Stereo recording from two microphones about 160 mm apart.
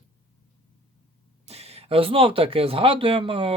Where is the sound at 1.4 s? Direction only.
40° right (ahead or behind).